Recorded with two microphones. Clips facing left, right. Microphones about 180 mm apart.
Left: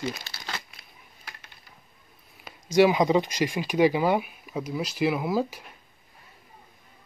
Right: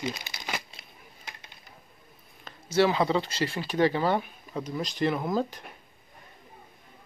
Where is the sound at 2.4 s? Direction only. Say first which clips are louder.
Left 4 dB; 15° left (ahead or behind).